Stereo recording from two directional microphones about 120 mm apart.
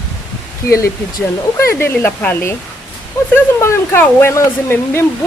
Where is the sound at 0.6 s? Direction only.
25° left (ahead or behind).